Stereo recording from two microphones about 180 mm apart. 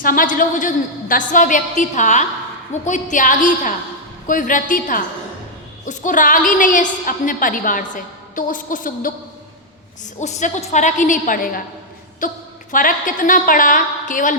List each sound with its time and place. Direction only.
0.0 s a woman's voice: 50° left (ahead or behind)